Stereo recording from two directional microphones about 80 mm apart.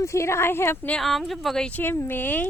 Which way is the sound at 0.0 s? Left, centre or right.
Left.